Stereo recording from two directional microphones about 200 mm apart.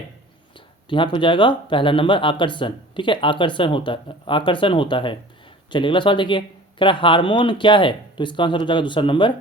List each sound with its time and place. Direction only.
0.9 s speech: 25° left (ahead or behind)